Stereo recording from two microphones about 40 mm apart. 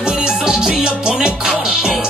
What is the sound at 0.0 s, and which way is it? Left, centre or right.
Music, centre.